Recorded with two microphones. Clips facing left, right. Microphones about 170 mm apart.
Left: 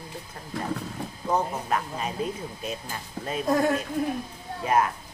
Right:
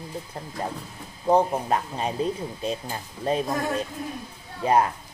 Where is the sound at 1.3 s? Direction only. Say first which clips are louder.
Right 6 dB; 30° right (ahead or behind).